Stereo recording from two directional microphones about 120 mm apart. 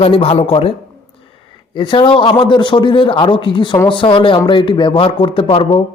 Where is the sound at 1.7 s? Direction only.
40° left (ahead or behind).